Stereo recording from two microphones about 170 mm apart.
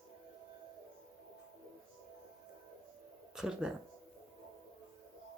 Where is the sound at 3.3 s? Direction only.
5° right (ahead or behind).